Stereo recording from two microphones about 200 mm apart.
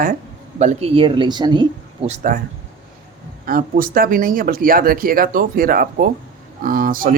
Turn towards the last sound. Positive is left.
turn(degrees=-45)  # may be behind; listen again after turning